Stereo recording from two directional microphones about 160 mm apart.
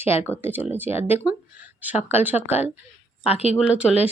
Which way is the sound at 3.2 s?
40° left (ahead or behind).